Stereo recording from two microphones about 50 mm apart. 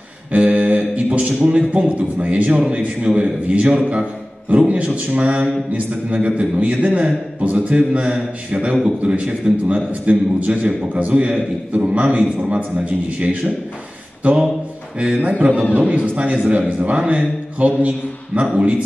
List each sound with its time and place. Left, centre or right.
0.3 s a sound: right
2.0 s a man's voice: right
6.5 s a man's voice: right
15.0 s a man's voice: right